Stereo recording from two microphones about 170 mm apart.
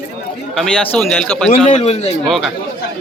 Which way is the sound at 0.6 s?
5° left (ahead or behind).